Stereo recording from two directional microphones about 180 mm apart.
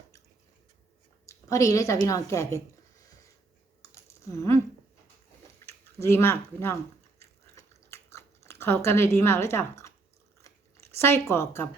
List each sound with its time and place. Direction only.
1.3 s speech: 15° left (ahead or behind)
3.9 s typing: 15° left (ahead or behind)
5.6 s speech: 15° left (ahead or behind)
7.2 s chewing: 15° left (ahead or behind)
10.9 s speech: 15° left (ahead or behind)